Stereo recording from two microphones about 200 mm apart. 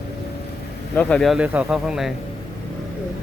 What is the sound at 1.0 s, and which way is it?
Speech, 5° left (ahead or behind).